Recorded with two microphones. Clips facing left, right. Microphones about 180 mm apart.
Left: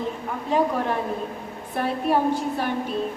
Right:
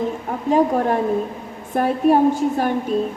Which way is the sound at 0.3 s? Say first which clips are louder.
Right 5 dB; 45° right (ahead or behind).